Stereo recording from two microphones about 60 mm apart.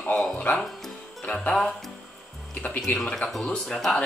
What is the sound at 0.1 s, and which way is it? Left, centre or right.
Speech, left.